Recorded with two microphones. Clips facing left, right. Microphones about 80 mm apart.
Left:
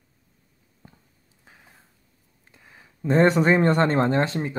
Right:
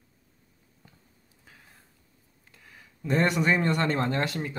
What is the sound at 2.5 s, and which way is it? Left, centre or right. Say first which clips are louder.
Speech: left 2 dB; left.